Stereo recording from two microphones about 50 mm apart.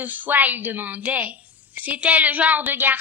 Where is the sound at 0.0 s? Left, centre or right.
Right.